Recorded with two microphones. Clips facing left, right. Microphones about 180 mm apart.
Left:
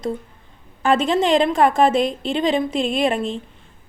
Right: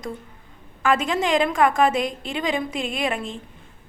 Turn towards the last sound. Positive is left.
turn(degrees=30)  # may be behind; listen again after turning